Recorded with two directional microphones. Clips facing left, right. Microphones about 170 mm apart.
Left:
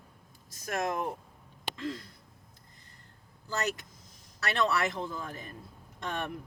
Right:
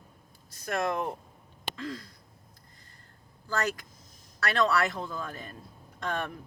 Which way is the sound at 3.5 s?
20° left (ahead or behind).